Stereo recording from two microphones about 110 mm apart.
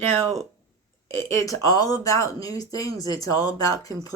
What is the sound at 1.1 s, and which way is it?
Speech, 25° left (ahead or behind).